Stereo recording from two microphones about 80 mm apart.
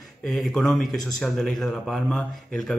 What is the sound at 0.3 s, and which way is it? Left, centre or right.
Speech, centre.